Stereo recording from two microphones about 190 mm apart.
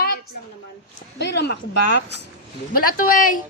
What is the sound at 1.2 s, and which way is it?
Speech, 60° left (ahead or behind).